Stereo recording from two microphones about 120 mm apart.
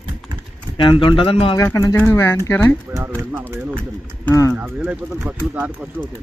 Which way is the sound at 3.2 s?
20° right (ahead or behind).